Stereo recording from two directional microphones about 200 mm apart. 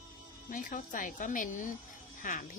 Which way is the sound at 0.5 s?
40° left (ahead or behind).